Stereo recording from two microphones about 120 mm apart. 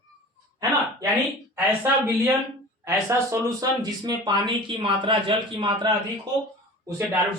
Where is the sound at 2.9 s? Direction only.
30° right (ahead or behind); by 5.9 s 45° right (ahead or behind).